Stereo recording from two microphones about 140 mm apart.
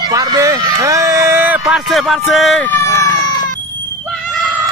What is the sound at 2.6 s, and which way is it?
Chicken, 15° left (ahead or behind).